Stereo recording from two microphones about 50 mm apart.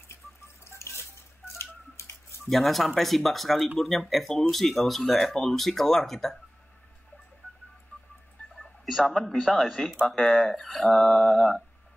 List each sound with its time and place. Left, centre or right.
0.7 s a sound: left
2.5 s speech: centre
9.0 s speech: centre